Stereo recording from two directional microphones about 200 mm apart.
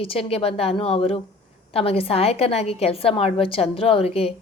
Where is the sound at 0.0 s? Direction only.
30° left (ahead or behind).